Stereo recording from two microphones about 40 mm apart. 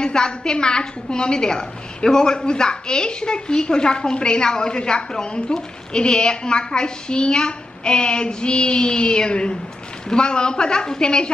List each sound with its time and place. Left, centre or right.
0.0 s a woman's voice: centre